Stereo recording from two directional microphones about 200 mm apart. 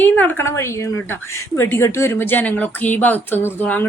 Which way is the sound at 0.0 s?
10° left (ahead or behind).